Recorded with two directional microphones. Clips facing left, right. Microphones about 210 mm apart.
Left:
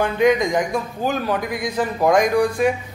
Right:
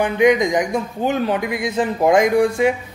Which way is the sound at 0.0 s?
20° right (ahead or behind).